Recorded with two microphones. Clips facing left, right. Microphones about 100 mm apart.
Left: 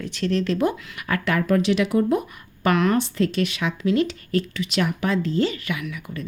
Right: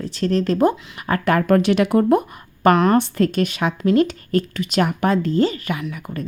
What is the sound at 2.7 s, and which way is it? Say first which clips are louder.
Speech: right 5 dB; 40° right (ahead or behind).